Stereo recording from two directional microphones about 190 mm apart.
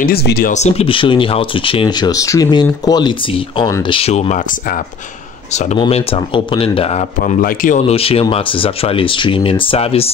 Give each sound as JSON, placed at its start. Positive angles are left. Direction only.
{"t": 0.0, "sound": "speech", "side_deg": 55}
{"t": 0.5, "sound": "speech", "side_deg": 35}
{"t": 7.9, "sound": "speech", "side_deg": 30}